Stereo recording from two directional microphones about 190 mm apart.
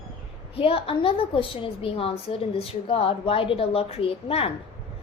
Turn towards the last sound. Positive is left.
turn(degrees=30)  # may be behind; listen again after turning